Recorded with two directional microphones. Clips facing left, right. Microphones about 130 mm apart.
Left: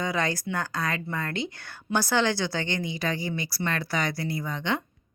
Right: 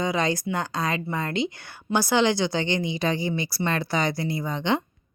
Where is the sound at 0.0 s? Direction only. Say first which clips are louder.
Right 3 dB; 20° right (ahead or behind).